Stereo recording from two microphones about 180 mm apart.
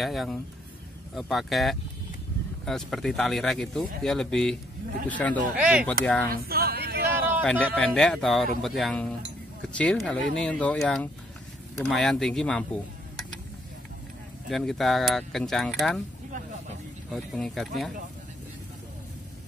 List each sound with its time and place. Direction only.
0.0 s speech: centre (ahead or behind)
5.6 s speech: 5° right (ahead or behind)
6.3 s a sound: 55° right (ahead or behind)
7.4 s speech: 5° left (ahead or behind)
14.5 s speech: centre (ahead or behind)
17.1 s speech: centre (ahead or behind)